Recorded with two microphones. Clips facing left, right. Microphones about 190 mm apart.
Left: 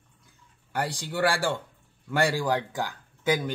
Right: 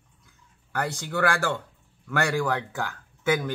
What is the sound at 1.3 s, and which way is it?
Speech, 10° left (ahead or behind).